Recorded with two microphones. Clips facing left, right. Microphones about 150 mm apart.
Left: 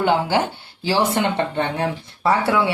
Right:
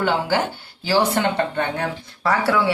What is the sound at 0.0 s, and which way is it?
Speech, 20° left (ahead or behind).